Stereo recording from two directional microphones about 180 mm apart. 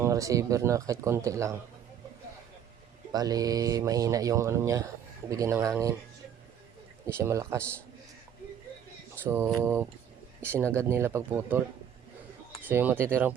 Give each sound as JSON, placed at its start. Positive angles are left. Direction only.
{"t": 0.0, "sound": "speech", "side_deg": -20}
{"t": 3.1, "sound": "speech", "side_deg": -20}
{"t": 7.1, "sound": "speech", "side_deg": -15}
{"t": 9.2, "sound": "speech", "side_deg": -15}
{"t": 12.6, "sound": "speech", "side_deg": -10}